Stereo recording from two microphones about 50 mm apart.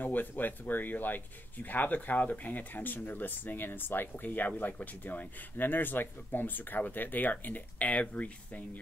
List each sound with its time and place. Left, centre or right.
0.0 s speech: left